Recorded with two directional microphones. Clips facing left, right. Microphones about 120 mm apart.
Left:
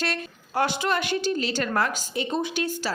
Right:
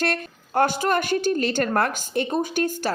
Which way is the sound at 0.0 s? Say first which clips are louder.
Right 4 dB; 50° right (ahead or behind).